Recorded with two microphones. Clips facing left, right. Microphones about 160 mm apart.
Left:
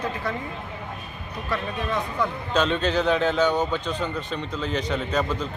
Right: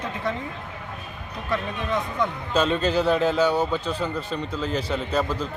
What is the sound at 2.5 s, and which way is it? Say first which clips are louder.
A man's voice: right 1 dB; 5° right (ahead or behind).